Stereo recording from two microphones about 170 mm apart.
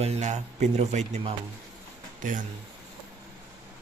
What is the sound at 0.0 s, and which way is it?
A man's voice, 40° right (ahead or behind).